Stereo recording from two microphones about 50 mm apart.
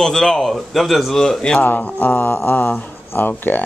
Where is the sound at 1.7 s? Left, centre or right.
Left.